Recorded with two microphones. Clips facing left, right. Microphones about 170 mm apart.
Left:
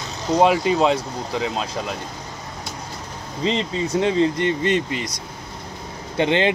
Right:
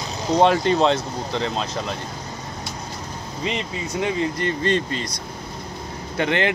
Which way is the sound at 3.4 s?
30° left (ahead or behind).